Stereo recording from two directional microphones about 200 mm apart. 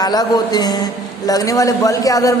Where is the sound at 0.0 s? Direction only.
20° left (ahead or behind).